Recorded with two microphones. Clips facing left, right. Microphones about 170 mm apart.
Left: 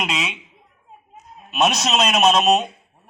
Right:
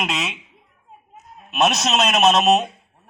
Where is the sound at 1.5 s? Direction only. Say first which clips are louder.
Even; centre (ahead or behind).